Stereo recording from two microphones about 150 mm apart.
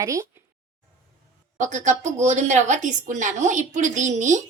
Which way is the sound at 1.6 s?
55° right (ahead or behind).